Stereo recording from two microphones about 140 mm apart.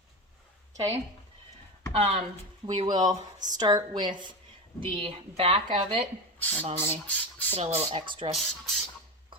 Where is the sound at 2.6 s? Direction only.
30° right (ahead or behind).